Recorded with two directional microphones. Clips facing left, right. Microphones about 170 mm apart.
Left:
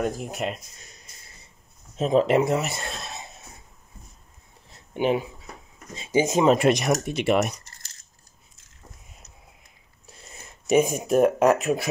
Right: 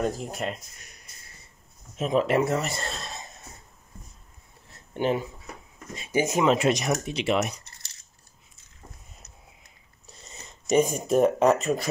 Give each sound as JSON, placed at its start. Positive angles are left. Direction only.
{"t": 0.0, "sound": "speech", "side_deg": 15}
{"t": 2.0, "sound": "speech", "side_deg": 30}
{"t": 2.7, "sound": "speech", "side_deg": 5}
{"t": 4.9, "sound": "speech", "side_deg": 15}
{"t": 6.6, "sound": "speech", "side_deg": 60}
{"t": 10.2, "sound": "speech", "side_deg": 10}